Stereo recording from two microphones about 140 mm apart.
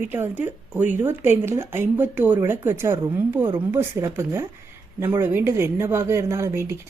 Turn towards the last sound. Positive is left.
turn(degrees=-20)  # may be behind; listen again after turning